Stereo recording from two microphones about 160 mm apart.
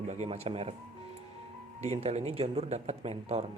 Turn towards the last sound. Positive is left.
turn(degrees=-40)  # may be behind; listen again after turning